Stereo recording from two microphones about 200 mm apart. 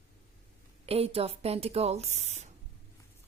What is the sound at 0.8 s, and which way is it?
Speech, 30° right (ahead or behind).